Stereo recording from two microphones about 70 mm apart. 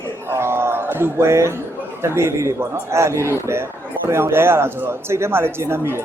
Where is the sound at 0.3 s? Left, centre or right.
Right.